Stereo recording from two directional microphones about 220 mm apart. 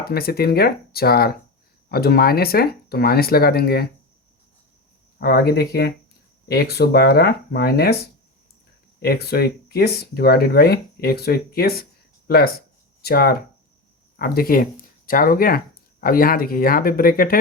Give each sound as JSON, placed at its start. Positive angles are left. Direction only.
{"t": 0.0, "sound": "speech", "side_deg": 45}
{"t": 5.2, "sound": "speech", "side_deg": 45}
{"t": 9.0, "sound": "speech", "side_deg": 45}